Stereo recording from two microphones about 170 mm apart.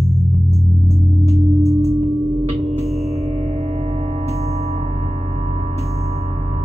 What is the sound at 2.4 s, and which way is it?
Music, 40° right (ahead or behind).